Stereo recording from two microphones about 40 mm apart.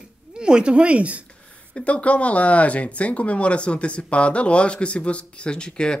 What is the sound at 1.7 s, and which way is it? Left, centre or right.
Speech, left.